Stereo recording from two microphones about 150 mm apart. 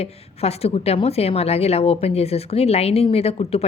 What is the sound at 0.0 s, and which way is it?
A woman's voice, 45° left (ahead or behind).